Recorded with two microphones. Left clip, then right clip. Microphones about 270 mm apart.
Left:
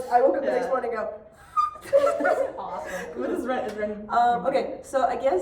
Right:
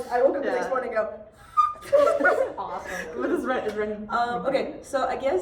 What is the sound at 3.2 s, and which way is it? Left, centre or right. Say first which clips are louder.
Speech: right 2 dB; centre.